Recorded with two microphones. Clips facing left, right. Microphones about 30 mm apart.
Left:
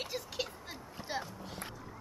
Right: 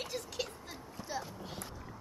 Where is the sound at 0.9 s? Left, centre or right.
Left.